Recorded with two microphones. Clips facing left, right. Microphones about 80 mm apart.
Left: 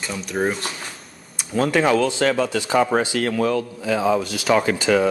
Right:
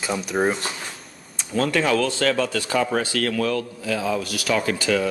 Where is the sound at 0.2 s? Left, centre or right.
Centre.